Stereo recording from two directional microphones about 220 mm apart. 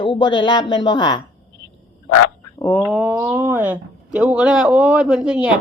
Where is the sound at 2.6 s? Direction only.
10° left (ahead or behind).